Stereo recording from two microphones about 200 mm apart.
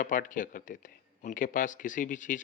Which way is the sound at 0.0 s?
40° left (ahead or behind).